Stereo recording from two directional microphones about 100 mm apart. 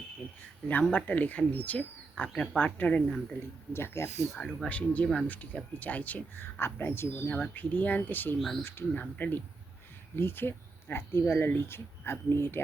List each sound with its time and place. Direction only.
0.9 s speech: 15° left (ahead or behind)
3.7 s speech: 25° left (ahead or behind)
4.3 s speech: 5° left (ahead or behind); by 7.2 s 25° left (ahead or behind)
7.3 s speech: 10° left (ahead or behind)